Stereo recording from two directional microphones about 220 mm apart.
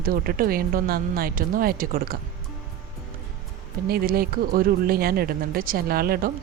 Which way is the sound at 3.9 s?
45° right (ahead or behind).